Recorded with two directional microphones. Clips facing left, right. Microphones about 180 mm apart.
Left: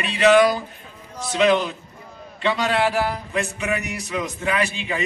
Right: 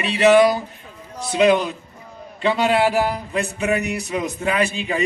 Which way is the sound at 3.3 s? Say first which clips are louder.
Right 4 dB; 35° right (ahead or behind).